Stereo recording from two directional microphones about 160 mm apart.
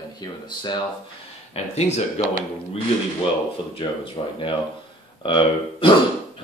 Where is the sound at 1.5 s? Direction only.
45° left (ahead or behind).